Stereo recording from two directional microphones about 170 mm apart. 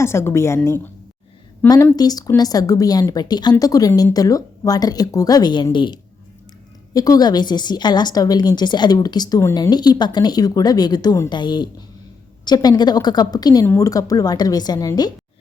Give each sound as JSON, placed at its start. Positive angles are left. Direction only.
{"t": 0.0, "sound": "a woman's voice", "side_deg": 15}